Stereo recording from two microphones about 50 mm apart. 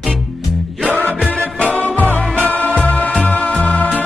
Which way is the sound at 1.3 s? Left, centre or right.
Left.